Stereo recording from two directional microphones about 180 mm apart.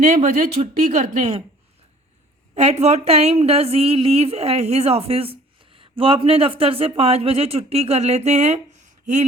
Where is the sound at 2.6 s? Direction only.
35° right (ahead or behind).